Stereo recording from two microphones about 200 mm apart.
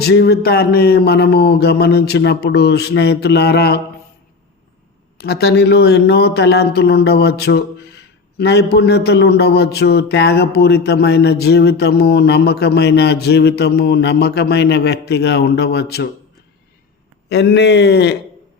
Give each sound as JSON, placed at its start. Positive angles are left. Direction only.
{"t": 0.0, "sound": "a man's voice", "side_deg": 55}
{"t": 5.2, "sound": "a man's voice", "side_deg": 55}
{"t": 17.2, "sound": "a man's voice", "side_deg": 60}